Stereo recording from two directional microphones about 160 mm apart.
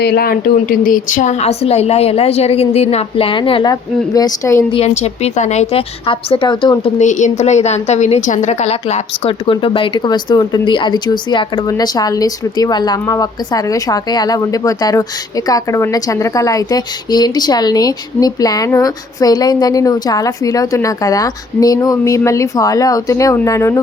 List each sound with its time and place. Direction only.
0.0 s a woman's voice: 85° left; by 4.6 s 20° left (ahead or behind)
4.7 s a woman's voice: 40° left (ahead or behind)
7.0 s a woman's voice: 50° left (ahead or behind); by 23.8 s 20° left (ahead or behind)